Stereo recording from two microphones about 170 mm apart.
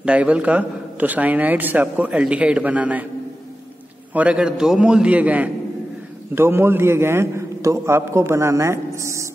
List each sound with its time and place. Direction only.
0.0 s speech: 5° right (ahead or behind)
4.1 s speech: 5° right (ahead or behind)